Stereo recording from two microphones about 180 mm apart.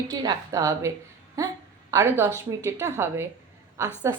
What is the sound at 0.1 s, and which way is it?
A woman's voice, 20° right (ahead or behind).